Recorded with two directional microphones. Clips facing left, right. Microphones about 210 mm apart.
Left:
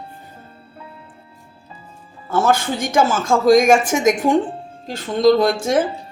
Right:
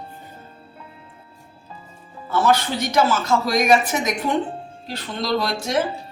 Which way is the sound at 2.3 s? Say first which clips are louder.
Left 2 dB; 50° left (ahead or behind).